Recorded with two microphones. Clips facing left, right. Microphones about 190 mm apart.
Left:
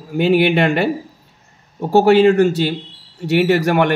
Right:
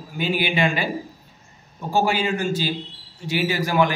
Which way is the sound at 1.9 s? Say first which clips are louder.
Left 11 dB; 65° left (ahead or behind).